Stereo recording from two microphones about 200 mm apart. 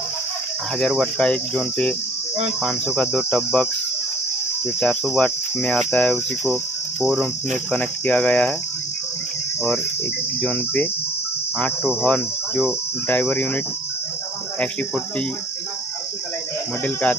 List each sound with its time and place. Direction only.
0.7 s cricket: centre (ahead or behind)
3.0 s cricket: 5° left (ahead or behind)
4.7 s cricket: 5° left (ahead or behind)
6.5 s insect: 10° right (ahead or behind)
7.7 s cricket: 5° left (ahead or behind)
10.4 s cricket: 10° left (ahead or behind)
11.8 s cricket: 5° right (ahead or behind)
13.1 s cricket: 10° left (ahead or behind)